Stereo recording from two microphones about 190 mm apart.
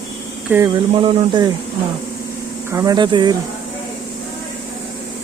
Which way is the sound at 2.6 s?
15° right (ahead or behind).